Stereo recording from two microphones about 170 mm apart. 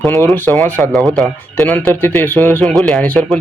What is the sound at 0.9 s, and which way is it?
Speech, centre (ahead or behind).